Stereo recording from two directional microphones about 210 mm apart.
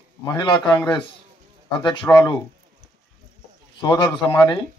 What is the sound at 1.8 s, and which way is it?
Speech, 20° left (ahead or behind).